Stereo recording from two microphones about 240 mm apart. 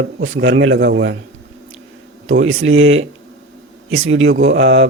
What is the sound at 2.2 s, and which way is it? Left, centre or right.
A man's voice, right.